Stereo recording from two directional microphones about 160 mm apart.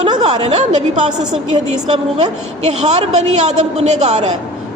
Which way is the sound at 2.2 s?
45° right (ahead or behind).